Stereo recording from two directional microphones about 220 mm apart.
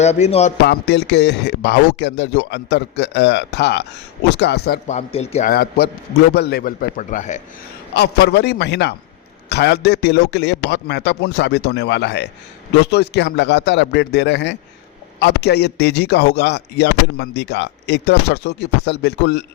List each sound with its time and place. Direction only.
0.0 s speech: 30° left (ahead or behind)
0.6 s a man's voice: 50° left (ahead or behind)
4.9 s speech: 30° left (ahead or behind)
5.5 s a man's voice: 45° left (ahead or behind)
7.9 s a man's voice: 45° left (ahead or behind)